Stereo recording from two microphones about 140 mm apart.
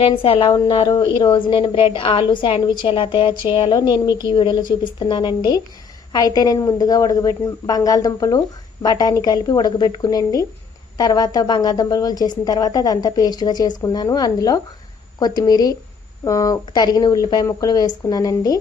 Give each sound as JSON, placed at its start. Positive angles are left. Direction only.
{"t": 0.0, "sound": "a woman's voice", "side_deg": 40}
{"t": 0.5, "sound": "a woman's voice", "side_deg": 30}